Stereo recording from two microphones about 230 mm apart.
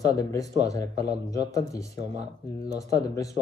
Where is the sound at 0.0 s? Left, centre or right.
Centre.